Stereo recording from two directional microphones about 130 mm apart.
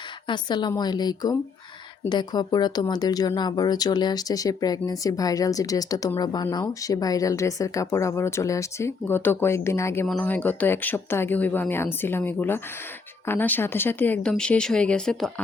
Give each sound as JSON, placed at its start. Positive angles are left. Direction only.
{"t": 0.3, "sound": "speech", "side_deg": 35}